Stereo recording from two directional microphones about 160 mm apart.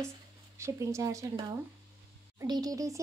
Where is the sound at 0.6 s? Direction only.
20° right (ahead or behind).